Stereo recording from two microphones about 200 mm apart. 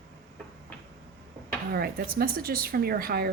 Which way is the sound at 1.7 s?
50° right (ahead or behind).